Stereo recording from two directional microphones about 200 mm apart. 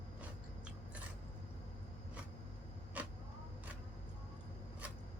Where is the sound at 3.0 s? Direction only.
10° right (ahead or behind).